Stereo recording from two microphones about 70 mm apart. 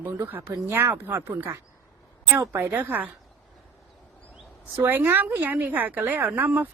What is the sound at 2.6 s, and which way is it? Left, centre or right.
Speech, right.